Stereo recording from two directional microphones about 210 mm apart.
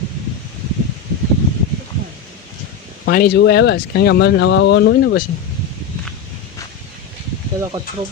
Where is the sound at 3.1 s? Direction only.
45° left (ahead or behind).